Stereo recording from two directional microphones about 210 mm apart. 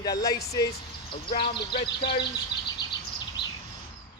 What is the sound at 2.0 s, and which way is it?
Speech, 50° left (ahead or behind).